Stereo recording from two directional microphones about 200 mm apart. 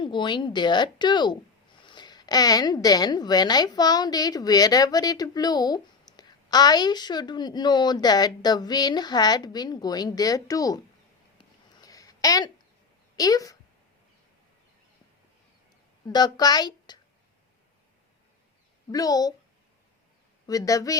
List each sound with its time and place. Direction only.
0.0 s a woman's voice: 25° left (ahead or behind)
11.3 s a sound: 20° left (ahead or behind)
13.1 s a woman's voice: 20° left (ahead or behind)
16.0 s a woman's voice: 20° left (ahead or behind)
18.9 s a woman's voice: 20° left (ahead or behind)
20.5 s a woman's voice: 15° left (ahead or behind)